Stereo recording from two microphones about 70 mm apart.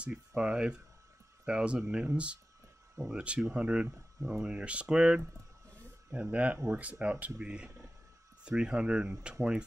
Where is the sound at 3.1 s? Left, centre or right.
Centre.